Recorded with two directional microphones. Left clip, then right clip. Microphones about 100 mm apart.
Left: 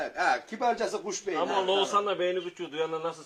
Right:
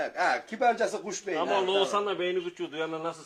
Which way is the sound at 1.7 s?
25° right (ahead or behind).